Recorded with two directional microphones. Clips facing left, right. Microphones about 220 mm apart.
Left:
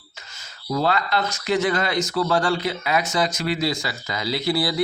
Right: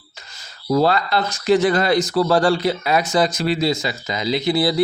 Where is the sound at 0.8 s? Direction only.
35° right (ahead or behind).